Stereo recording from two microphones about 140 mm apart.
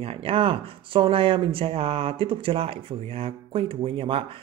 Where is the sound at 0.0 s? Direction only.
40° right (ahead or behind).